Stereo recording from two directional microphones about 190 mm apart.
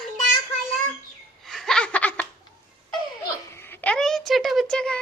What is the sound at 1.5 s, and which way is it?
Laughter, centre (ahead or behind).